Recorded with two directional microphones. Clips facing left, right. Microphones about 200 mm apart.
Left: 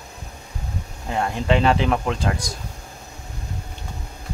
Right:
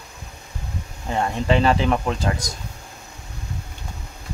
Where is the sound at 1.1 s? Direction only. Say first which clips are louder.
Even; centre (ahead or behind).